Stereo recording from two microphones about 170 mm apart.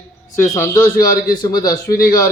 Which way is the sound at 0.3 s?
15° left (ahead or behind).